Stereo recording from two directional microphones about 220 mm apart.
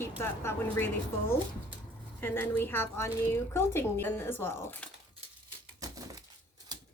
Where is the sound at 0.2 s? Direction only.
10° left (ahead or behind).